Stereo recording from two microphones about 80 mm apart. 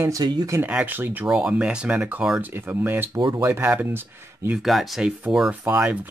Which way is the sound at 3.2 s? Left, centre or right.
Right.